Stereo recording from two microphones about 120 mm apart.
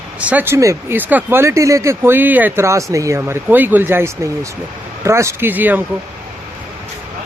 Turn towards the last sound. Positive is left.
turn(degrees=-15)  # may be behind; listen again after turning